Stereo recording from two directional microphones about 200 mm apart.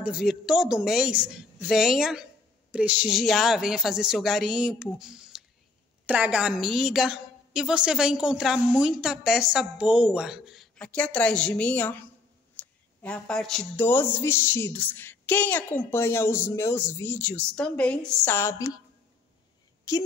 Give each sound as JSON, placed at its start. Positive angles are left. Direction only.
{"t": 0.0, "sound": "a woman's voice", "side_deg": -5}
{"t": 19.9, "sound": "a woman's voice", "side_deg": 15}